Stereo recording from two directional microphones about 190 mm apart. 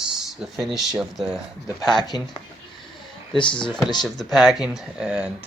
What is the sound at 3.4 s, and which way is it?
Speech, 25° left (ahead or behind).